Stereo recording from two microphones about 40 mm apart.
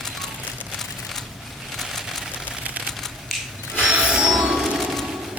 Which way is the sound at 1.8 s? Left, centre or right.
Centre.